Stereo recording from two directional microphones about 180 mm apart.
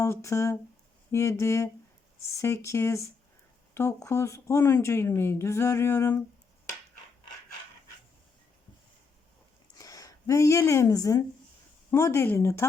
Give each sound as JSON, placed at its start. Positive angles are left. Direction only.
{"t": 0.0, "sound": "a woman's voice", "side_deg": 15}
{"t": 9.7, "sound": "a woman's voice", "side_deg": 20}